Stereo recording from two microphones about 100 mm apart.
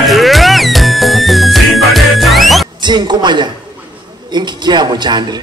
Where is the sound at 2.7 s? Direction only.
50° right (ahead or behind).